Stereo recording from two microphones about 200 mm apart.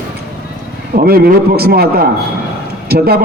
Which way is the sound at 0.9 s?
50° right (ahead or behind).